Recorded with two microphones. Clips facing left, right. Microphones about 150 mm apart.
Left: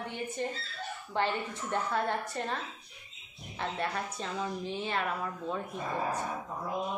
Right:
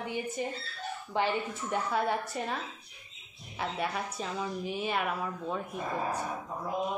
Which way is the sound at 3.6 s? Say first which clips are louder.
Right 1 dB; 10° right (ahead or behind).